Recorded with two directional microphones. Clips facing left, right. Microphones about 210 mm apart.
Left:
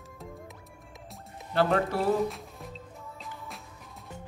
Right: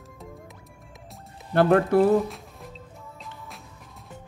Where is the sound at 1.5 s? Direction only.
55° right (ahead or behind).